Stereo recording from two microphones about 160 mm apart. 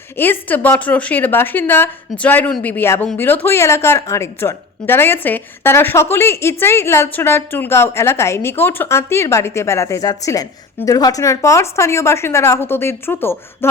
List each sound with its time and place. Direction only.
0.2 s speech: 10° left (ahead or behind)